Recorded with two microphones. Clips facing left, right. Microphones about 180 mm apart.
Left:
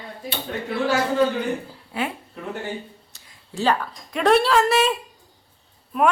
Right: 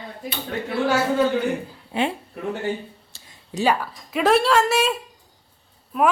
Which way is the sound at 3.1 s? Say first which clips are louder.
Right 2 dB; 25° right (ahead or behind).